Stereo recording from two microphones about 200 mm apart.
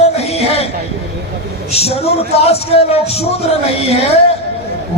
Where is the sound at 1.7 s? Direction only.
30° left (ahead or behind).